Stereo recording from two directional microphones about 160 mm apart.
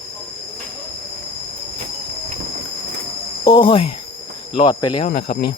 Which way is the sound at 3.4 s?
30° left (ahead or behind).